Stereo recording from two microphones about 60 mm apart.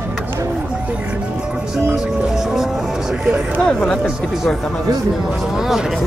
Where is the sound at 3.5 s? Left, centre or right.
Centre.